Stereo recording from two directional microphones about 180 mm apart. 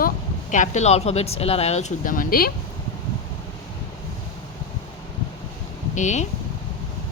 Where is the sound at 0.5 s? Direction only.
45° left (ahead or behind).